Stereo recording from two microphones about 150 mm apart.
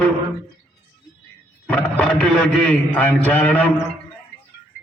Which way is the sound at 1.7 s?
10° left (ahead or behind).